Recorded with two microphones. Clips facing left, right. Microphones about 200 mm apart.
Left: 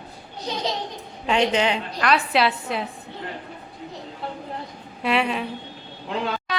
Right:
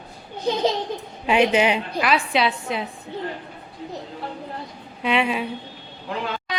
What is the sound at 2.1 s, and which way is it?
Speech, centre (ahead or behind).